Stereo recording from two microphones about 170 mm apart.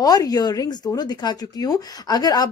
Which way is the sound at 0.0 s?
20° left (ahead or behind).